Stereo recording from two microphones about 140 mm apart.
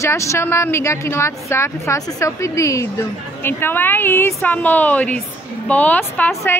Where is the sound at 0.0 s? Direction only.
20° left (ahead or behind).